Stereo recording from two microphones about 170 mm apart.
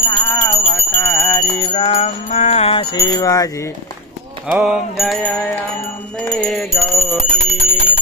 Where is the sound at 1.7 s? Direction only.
35° left (ahead or behind).